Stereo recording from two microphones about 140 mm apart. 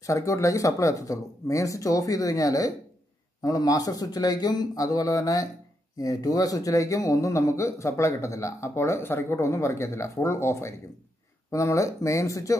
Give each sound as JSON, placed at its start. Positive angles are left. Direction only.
{"t": 0.0, "sound": "speech", "side_deg": 20}